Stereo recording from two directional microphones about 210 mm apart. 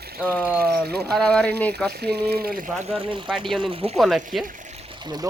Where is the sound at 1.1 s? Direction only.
5° left (ahead or behind).